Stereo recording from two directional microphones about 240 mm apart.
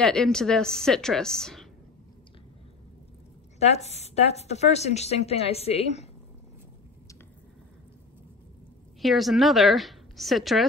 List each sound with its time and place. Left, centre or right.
0.0 s a woman's voice: centre
3.5 s a woman's voice: left
9.0 s a woman's voice: centre